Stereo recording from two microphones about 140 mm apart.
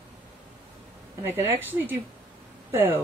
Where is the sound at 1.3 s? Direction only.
15° right (ahead or behind).